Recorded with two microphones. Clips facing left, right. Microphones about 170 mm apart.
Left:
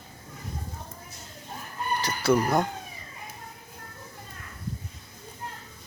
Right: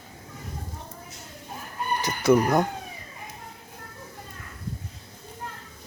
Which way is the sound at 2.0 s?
15° right (ahead or behind).